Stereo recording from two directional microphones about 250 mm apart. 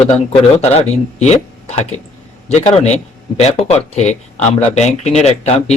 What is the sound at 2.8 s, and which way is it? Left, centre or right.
Speech, left.